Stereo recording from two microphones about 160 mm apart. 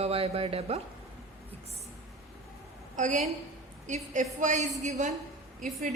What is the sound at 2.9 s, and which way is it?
A woman's voice, 50° right (ahead or behind).